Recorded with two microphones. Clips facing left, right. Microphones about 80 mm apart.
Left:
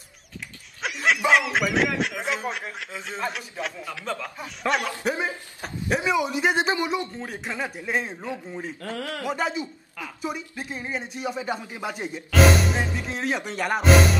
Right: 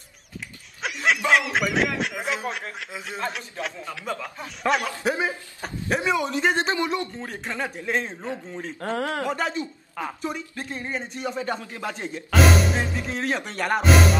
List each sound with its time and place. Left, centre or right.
0.8 s speech: centre
3.8 s a man's voice: centre
8.8 s speech: right
9.3 s a man's voice: centre
12.4 s speech: centre